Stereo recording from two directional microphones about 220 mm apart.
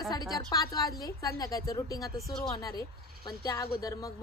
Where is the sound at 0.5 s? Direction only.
15° left (ahead or behind).